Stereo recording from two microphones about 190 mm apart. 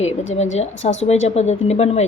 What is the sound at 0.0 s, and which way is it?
A woman's voice, 35° left (ahead or behind).